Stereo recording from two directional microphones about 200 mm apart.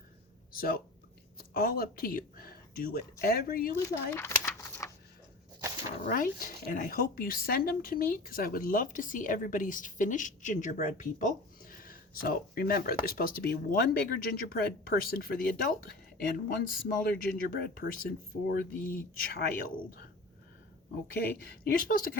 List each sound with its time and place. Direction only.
0.5 s speech: 45° left (ahead or behind)
3.8 s a sound: 10° left (ahead or behind)
6.1 s speech: 45° left (ahead or behind)
21.1 s speech: 50° left (ahead or behind)